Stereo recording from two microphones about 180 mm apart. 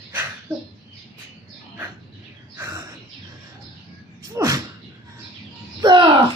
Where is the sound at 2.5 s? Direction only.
15° right (ahead or behind).